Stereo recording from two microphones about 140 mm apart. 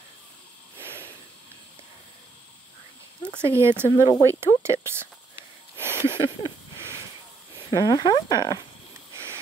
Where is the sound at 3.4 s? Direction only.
20° right (ahead or behind).